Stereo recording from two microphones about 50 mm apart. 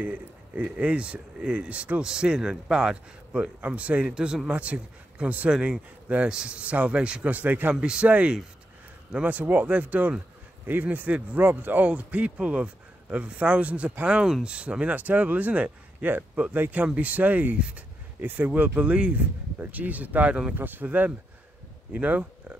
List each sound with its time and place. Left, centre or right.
0.0 s speech: right
2.0 s speech: centre
3.6 s speech: right
4.1 s speech: centre
4.5 s speech: right
7.3 s speech: right
7.8 s speech: centre; by 16.8 s right
16.8 s speech: right
17.6 s speech: right
18.2 s speech: right
20.5 s speech: right